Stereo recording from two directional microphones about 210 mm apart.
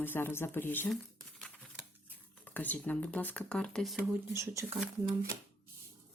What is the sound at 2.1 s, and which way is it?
Speech, 10° left (ahead or behind).